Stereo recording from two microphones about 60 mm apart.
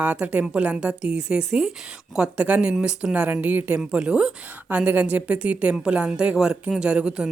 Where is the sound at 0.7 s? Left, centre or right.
Centre.